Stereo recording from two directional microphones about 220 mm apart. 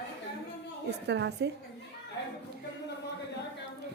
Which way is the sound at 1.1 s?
50° right (ahead or behind).